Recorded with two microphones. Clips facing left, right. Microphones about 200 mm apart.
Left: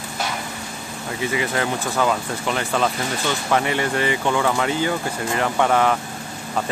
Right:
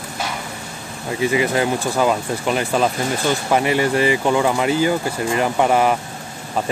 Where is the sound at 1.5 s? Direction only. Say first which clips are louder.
Right 4 dB; 15° right (ahead or behind).